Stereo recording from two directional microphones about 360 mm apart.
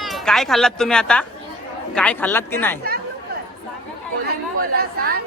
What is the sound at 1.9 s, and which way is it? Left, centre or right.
Speech, centre.